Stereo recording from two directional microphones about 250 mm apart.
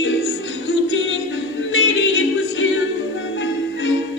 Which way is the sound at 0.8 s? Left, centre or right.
Left.